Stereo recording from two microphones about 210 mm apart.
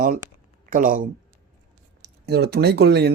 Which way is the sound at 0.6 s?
40° right (ahead or behind).